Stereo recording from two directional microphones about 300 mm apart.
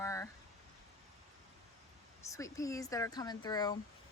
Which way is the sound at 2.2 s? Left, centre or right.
Centre.